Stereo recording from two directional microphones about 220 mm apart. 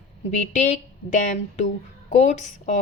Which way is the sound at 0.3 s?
30° left (ahead or behind).